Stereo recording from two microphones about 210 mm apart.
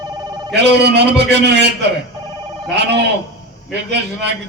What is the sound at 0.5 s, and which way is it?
A man's voice, 55° right (ahead or behind).